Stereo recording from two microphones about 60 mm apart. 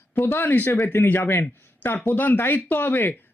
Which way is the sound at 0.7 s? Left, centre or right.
Left.